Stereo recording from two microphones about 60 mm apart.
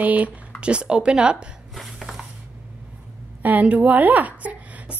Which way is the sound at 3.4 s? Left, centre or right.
Right.